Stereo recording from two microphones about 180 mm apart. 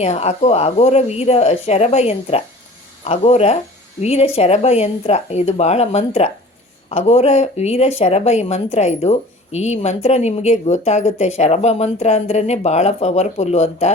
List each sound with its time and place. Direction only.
0.0 s speech: 35° left (ahead or behind)